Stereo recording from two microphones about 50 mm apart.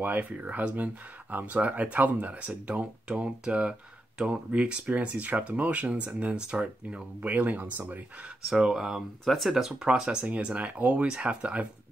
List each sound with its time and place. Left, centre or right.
0.0 s speech: right
8.6 s speech: centre; by 11.6 s right